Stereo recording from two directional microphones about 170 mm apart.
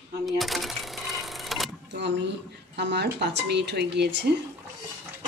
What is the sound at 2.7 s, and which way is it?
Speech, 90° right.